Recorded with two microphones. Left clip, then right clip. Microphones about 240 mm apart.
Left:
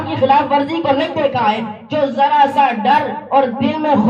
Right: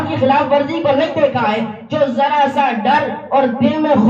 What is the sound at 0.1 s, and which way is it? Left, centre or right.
A woman's voice, left.